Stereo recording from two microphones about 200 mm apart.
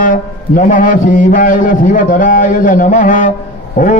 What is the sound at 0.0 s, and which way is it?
A man's voice, 40° left (ahead or behind).